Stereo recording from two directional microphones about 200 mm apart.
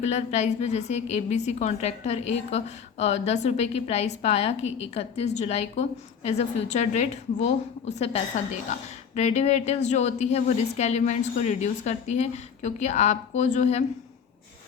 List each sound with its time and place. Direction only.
0.1 s a woman's voice: 35° left (ahead or behind)